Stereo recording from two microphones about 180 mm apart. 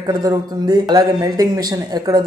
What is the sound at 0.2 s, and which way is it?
Speech, 20° right (ahead or behind).